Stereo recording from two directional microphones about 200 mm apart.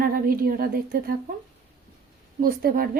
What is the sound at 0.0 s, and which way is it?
Speech, 45° right (ahead or behind).